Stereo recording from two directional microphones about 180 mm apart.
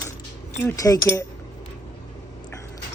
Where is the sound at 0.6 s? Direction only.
15° left (ahead or behind).